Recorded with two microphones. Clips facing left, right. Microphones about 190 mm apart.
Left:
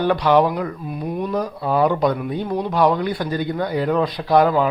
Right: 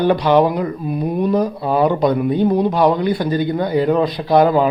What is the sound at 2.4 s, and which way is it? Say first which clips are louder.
Speech: right 8 dB; 30° right (ahead or behind).